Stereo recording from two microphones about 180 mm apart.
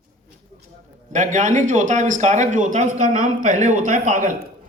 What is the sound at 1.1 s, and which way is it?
Speech, 45° right (ahead or behind).